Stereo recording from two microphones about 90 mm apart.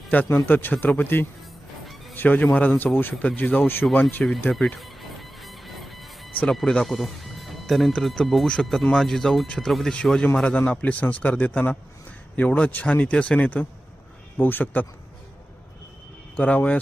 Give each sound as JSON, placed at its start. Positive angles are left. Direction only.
{"t": 0.1, "sound": "a man's voice", "side_deg": 20}
{"t": 4.5, "sound": "music", "side_deg": 0}
{"t": 6.5, "sound": "a man's voice", "side_deg": 5}
{"t": 16.4, "sound": "a man's voice", "side_deg": 15}